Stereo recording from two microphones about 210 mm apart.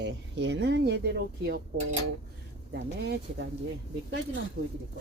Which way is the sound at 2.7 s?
55° right (ahead or behind).